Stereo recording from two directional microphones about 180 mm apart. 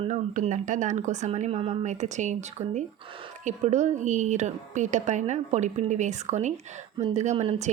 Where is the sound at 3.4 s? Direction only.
40° right (ahead or behind).